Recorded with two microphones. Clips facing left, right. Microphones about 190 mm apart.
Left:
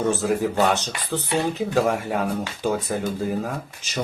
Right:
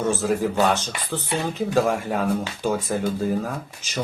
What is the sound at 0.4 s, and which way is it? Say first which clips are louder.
Speech: even; 15° left (ahead or behind).